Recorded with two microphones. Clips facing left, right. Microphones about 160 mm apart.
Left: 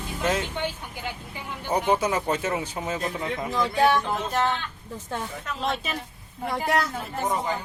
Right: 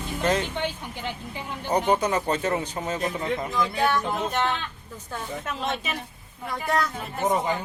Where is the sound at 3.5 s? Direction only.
25° left (ahead or behind).